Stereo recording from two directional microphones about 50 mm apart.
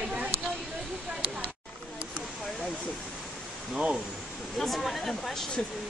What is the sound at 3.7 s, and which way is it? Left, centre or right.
Speech, centre.